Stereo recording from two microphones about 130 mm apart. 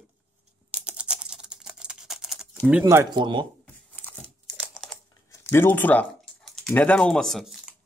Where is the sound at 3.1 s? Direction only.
35° right (ahead or behind).